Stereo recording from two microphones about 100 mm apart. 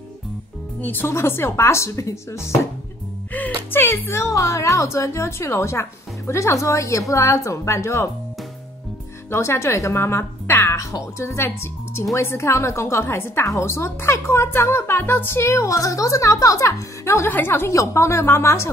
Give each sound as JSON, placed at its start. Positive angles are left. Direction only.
{"t": 0.7, "sound": "speech", "side_deg": 20}
{"t": 3.7, "sound": "speech", "side_deg": 20}
{"t": 9.3, "sound": "speech", "side_deg": 25}